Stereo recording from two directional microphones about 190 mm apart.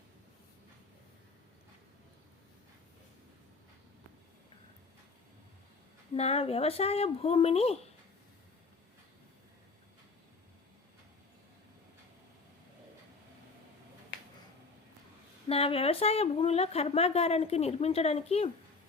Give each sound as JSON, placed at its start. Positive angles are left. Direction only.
{"t": 6.1, "sound": "a woman's voice", "side_deg": 35}
{"t": 15.4, "sound": "a woman's voice", "side_deg": 30}